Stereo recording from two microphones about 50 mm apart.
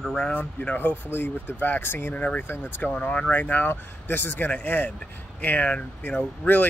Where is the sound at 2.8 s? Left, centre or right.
Left.